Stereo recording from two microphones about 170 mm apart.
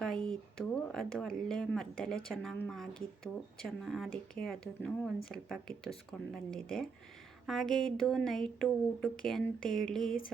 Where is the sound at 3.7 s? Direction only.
Centre (ahead or behind).